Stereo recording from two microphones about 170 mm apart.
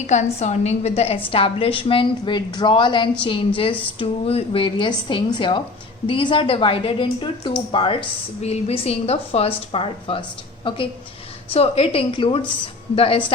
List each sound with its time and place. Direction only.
0.1 s a woman's voice: 45° left (ahead or behind)